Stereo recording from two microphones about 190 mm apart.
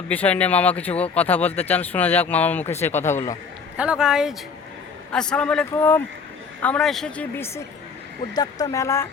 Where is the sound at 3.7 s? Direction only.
5° right (ahead or behind); by 9.0 s 15° left (ahead or behind).